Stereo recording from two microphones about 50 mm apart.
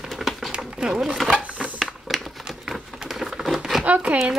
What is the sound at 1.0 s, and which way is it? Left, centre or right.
Chopping, centre.